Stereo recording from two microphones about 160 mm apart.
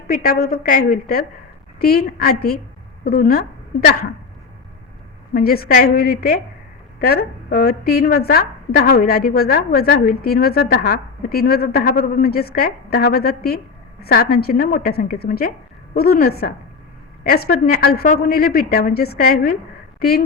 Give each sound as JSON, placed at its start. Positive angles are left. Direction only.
{"t": 0.1, "sound": "a woman's voice", "side_deg": 65}
{"t": 5.3, "sound": "a woman's voice", "side_deg": 70}